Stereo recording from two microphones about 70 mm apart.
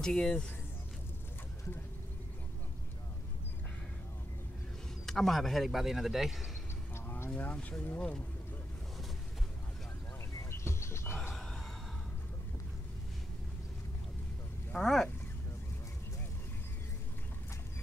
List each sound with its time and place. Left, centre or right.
0.0 s speech: centre
5.0 s speech: centre
7.2 s speech: centre
10.5 s a sound: left
14.7 s speech: centre